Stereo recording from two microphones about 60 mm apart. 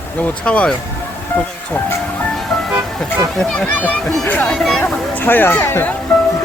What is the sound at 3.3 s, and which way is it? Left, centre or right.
Speech, centre.